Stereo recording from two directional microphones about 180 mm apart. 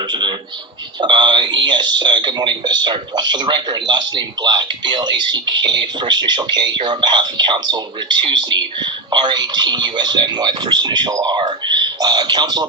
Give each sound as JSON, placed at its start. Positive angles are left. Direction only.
{"t": 0.1, "sound": "speech", "side_deg": -25}